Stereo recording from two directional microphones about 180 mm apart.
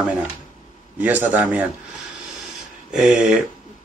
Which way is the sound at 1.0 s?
10° right (ahead or behind).